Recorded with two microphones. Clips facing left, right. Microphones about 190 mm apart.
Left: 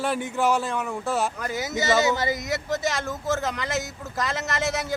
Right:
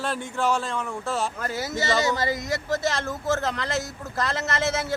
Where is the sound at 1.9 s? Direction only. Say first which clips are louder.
Left 2 dB; centre (ahead or behind).